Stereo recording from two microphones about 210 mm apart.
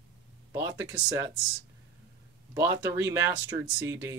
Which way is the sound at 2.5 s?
15° right (ahead or behind).